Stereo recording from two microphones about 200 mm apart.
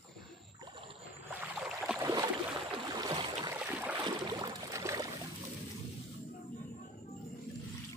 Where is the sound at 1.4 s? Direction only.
5° right (ahead or behind).